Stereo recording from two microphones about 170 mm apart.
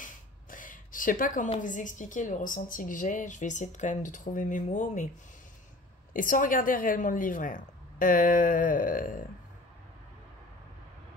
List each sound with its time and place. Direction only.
0.0 s a sound: 50° left (ahead or behind)
1.6 s a woman's voice: 50° left (ahead or behind)
6.1 s a woman's voice: 55° left (ahead or behind)